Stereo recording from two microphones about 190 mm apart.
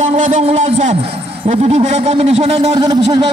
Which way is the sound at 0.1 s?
35° right (ahead or behind).